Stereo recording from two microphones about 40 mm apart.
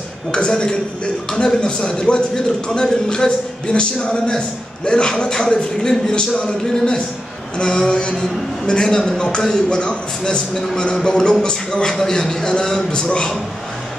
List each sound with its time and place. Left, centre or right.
0.3 s a man's voice: left